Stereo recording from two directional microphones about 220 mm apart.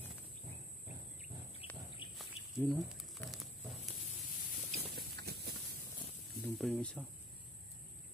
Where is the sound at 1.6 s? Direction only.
25° left (ahead or behind).